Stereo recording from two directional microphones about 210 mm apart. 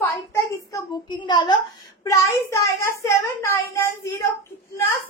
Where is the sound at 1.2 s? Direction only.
20° left (ahead or behind).